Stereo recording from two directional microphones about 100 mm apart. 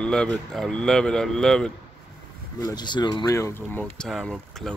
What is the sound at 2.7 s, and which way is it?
Speech, 45° left (ahead or behind).